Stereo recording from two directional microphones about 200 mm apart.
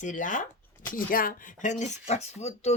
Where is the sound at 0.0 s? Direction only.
40° left (ahead or behind).